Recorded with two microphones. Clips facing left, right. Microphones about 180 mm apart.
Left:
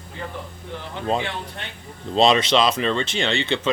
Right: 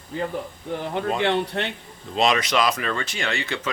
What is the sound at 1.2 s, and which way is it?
Speech, 65° right (ahead or behind).